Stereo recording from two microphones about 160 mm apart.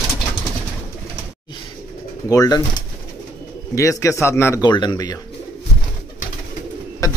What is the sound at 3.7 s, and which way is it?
Speech, 20° left (ahead or behind).